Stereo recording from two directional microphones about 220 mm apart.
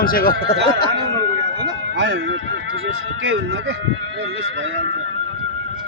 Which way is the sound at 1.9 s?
55° right (ahead or behind).